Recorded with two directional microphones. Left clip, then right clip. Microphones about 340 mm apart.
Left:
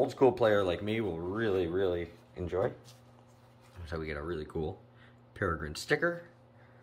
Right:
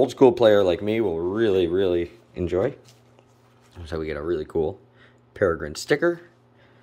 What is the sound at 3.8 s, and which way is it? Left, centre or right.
Speech, centre.